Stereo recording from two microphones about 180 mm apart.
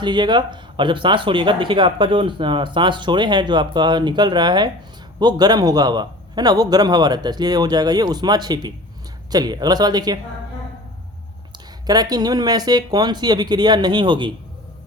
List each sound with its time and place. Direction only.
0.0 s speech: 25° right (ahead or behind)
11.9 s speech: 20° right (ahead or behind)